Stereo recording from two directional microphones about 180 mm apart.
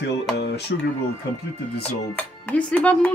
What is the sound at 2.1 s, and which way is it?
Speech, 10° left (ahead or behind).